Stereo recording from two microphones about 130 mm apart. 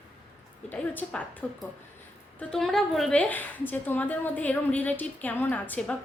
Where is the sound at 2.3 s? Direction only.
5° left (ahead or behind).